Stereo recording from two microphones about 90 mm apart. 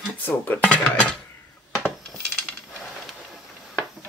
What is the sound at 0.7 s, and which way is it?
Cutlery, 10° left (ahead or behind).